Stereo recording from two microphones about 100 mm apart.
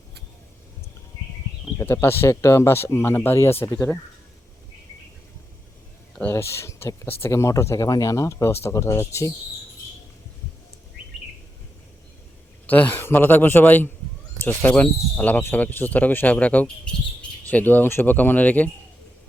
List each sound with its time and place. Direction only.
1.8 s speech: 25° left (ahead or behind)
6.3 s speech: 25° left (ahead or behind)
12.6 s speech: 20° left (ahead or behind)